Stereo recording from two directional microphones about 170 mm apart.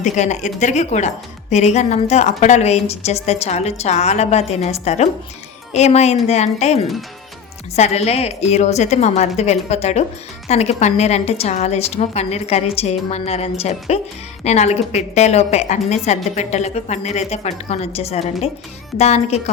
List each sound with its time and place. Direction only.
0.0 s speech: 45° left (ahead or behind)